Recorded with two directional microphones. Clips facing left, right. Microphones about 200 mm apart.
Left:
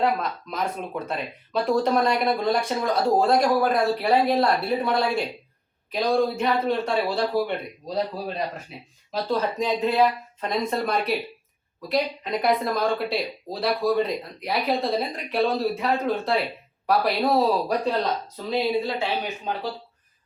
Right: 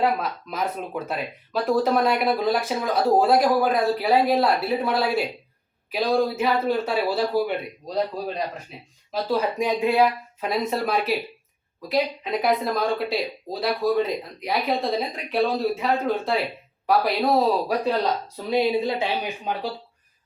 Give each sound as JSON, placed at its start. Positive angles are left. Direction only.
{"t": 0.0, "sound": "speech", "side_deg": -5}
{"t": 9.1, "sound": "speech", "side_deg": -10}
{"t": 18.5, "sound": "speech", "side_deg": -15}